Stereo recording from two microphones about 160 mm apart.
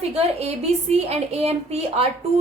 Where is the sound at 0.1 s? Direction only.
40° right (ahead or behind).